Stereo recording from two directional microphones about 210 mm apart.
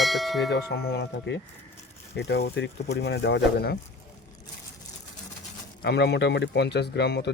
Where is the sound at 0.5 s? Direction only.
50° left (ahead or behind).